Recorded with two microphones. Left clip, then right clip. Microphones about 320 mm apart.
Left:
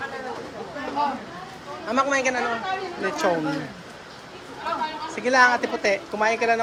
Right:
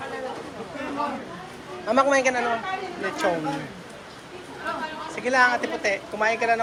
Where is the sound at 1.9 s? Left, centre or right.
Centre.